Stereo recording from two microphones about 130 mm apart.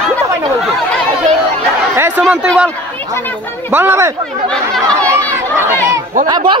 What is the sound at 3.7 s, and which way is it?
Speech, 15° right (ahead or behind).